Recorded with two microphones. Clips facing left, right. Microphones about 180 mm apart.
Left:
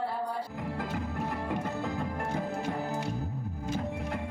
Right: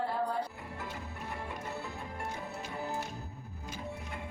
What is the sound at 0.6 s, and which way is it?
Music, 90° left.